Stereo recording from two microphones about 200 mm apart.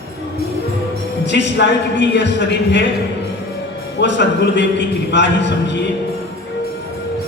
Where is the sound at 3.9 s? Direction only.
60° left (ahead or behind).